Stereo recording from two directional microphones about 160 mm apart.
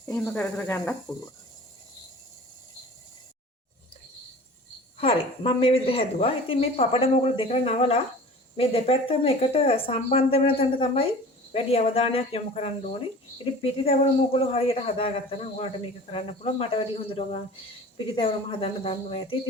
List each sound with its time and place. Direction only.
0.0 s speech: 15° left (ahead or behind)
4.9 s a woman's voice: 35° left (ahead or behind)